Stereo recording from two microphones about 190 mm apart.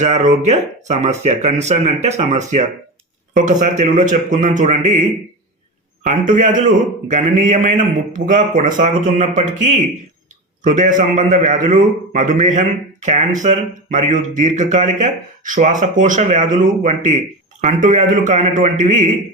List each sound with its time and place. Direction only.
0.0 s a man's voice: 40° right (ahead or behind)
6.0 s a man's voice: 40° right (ahead or behind)